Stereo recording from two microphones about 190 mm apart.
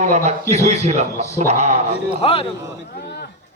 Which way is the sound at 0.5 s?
35° right (ahead or behind).